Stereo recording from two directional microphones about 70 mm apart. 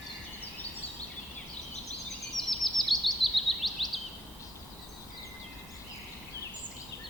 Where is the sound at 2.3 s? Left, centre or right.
Centre.